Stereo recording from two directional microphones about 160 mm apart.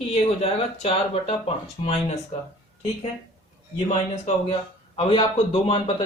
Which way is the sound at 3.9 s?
45° left (ahead or behind).